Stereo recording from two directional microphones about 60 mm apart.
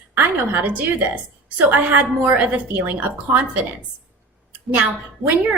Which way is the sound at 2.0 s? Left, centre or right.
Right.